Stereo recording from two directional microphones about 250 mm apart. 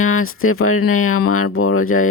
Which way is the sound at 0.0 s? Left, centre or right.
Left.